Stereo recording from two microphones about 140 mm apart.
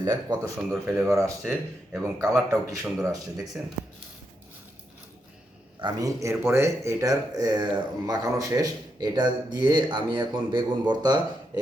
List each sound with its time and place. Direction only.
0.0 s speech: 25° right (ahead or behind)
0.7 s speech: centre (ahead or behind)
2.1 s speech: 25° right (ahead or behind)
5.8 s speech: 25° right (ahead or behind)